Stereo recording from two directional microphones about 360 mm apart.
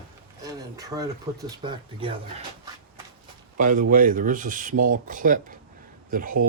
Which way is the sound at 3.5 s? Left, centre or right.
Right.